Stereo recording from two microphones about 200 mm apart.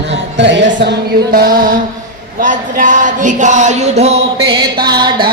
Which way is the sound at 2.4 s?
40° right (ahead or behind).